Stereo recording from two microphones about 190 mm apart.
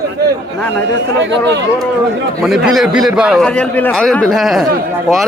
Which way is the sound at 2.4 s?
Centre (ahead or behind).